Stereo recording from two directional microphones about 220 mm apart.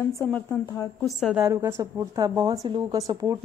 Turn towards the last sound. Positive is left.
turn(degrees=-15)  # may be behind; listen again after turning